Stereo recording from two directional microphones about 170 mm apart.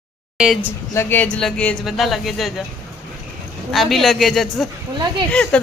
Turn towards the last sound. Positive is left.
turn(degrees=5)  # may be behind; listen again after turning